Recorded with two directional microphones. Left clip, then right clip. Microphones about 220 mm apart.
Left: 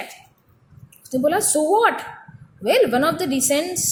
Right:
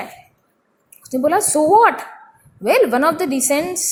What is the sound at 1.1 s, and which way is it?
A woman's voice, 15° right (ahead or behind).